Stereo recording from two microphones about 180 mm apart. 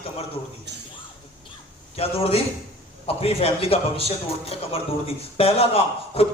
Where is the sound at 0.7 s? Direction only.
70° right (ahead or behind).